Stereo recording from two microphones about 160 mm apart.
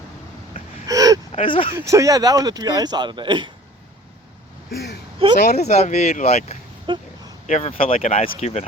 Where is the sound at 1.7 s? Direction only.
20° right (ahead or behind).